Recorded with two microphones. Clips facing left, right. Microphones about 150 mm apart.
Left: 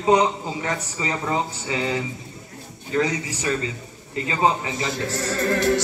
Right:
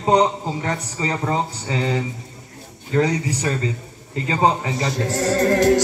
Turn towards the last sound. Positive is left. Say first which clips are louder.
# right 5 dB
turn(degrees=-40)  # may be behind; listen again after turning